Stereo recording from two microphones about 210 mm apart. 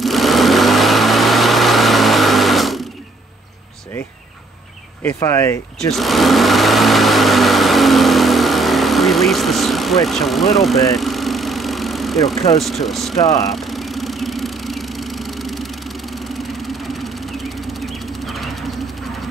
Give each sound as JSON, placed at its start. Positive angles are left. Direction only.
{"t": 0.0, "sound": "vehicle", "side_deg": 0}
{"t": 5.0, "sound": "speech", "side_deg": 10}
{"t": 5.9, "sound": "vehicle", "side_deg": 0}
{"t": 12.5, "sound": "speech", "side_deg": 0}
{"t": 13.2, "sound": "speech", "side_deg": 15}
{"t": 13.5, "sound": "vehicle", "side_deg": 0}
{"t": 17.7, "sound": "vehicle", "side_deg": 0}